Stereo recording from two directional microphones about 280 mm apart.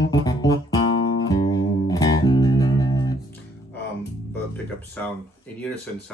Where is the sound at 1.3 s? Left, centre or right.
Centre.